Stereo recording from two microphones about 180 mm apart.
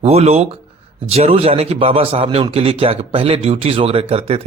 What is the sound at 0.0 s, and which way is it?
Speech, 35° right (ahead or behind).